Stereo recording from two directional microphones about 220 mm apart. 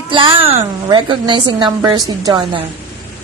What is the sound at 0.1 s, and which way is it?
A woman's voice, 25° right (ahead or behind).